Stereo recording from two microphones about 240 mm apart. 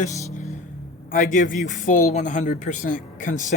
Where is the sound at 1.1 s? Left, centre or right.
Left.